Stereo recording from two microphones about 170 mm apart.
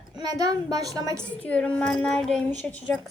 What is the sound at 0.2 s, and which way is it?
A child's voice, 20° right (ahead or behind).